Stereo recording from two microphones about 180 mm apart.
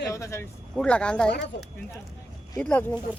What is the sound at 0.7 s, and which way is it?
Speech, 5° left (ahead or behind).